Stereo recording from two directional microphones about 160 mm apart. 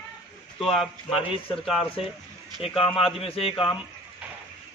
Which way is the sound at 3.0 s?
35° left (ahead or behind).